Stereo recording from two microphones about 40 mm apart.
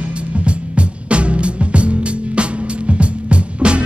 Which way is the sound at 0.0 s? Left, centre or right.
Right.